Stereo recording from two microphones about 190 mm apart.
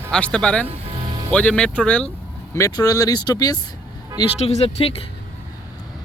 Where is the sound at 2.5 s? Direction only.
15° left (ahead or behind).